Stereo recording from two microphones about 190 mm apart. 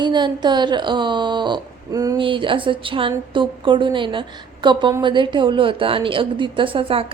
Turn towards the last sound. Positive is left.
turn(degrees=-30)  # may be behind; listen again after turning